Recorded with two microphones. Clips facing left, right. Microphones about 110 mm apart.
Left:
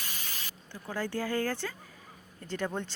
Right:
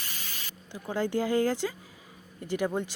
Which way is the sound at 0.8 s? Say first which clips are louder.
Right 5 dB; 25° right (ahead or behind).